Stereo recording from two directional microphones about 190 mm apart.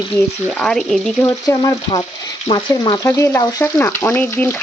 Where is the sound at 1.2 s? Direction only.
20° left (ahead or behind).